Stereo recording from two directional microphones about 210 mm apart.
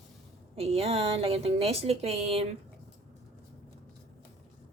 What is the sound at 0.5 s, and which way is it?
A woman's voice, 30° right (ahead or behind).